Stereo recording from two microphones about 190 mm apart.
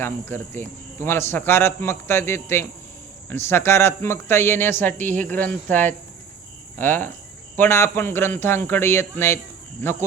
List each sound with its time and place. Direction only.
0.0 s speech: 10° left (ahead or behind)